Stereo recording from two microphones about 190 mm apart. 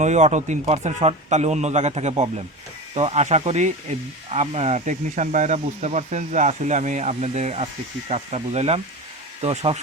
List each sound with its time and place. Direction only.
0.0 s speech: 35° right (ahead or behind)